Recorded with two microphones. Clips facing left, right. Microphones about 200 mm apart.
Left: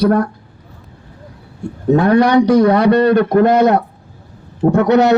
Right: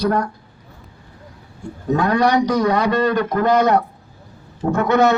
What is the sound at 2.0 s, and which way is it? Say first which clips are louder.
A man's voice: left 6 dB; 60° left (ahead or behind).